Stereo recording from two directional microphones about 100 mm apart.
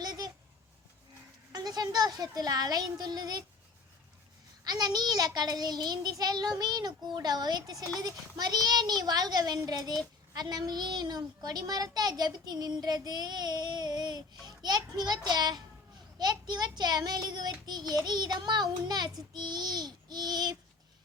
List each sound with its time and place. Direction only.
0.0 s a sound: 40° right (ahead or behind)
1.5 s speech: 40° right (ahead or behind)
4.6 s child singing: 40° right (ahead or behind)
10.3 s a child's voice: 40° right (ahead or behind)